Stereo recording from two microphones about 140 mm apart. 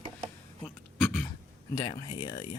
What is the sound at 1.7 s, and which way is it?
Speech, 35° left (ahead or behind).